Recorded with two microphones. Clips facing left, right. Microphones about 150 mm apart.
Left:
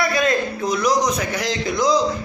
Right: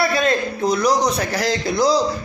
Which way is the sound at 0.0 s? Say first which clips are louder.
Right 1 dB; 30° right (ahead or behind).